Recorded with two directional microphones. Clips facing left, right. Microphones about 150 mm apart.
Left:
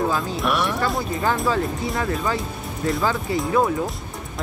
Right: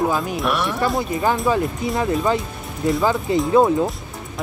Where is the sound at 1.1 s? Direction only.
20° right (ahead or behind).